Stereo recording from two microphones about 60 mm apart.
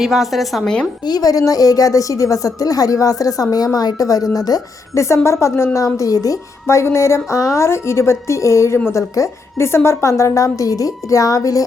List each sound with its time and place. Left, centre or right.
0.0 s a woman's voice: centre
1.1 s a woman's voice: left
4.9 s a woman's voice: left
5.7 s a woman's voice: left
6.7 s a woman's voice: left